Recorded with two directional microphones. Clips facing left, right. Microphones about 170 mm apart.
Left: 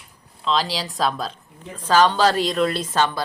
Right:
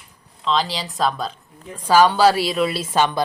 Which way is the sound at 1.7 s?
10° right (ahead or behind).